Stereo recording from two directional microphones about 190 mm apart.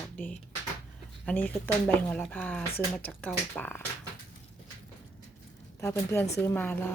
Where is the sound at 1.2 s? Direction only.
10° left (ahead or behind).